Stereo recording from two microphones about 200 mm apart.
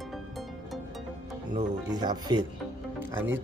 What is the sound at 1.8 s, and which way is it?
Speech, 20° right (ahead or behind).